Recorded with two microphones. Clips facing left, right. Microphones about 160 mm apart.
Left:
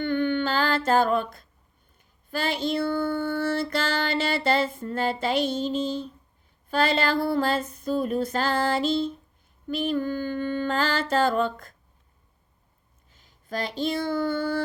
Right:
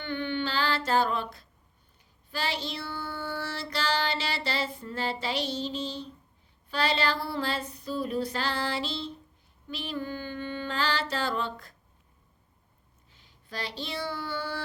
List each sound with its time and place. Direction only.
0.0 s humming: 50° left (ahead or behind)
2.3 s child singing: 50° left (ahead or behind)
13.1 s a sound: 45° left (ahead or behind)